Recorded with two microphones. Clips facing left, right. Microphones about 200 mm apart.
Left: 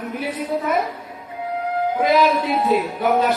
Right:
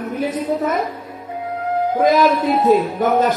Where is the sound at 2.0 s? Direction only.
45° right (ahead or behind).